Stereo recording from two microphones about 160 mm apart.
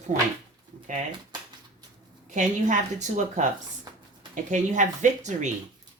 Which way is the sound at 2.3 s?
50° right (ahead or behind).